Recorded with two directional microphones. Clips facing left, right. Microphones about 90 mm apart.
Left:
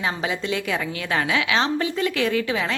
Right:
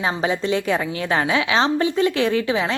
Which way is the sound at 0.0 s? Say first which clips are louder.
Right 4 dB; 30° right (ahead or behind).